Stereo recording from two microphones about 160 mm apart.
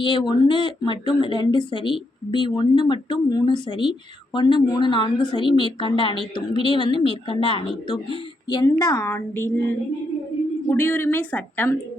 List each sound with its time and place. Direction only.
0.0 s speech: 30° left (ahead or behind)
8.4 s a woman's voice: 25° left (ahead or behind)
10.7 s a woman's voice: 10° left (ahead or behind)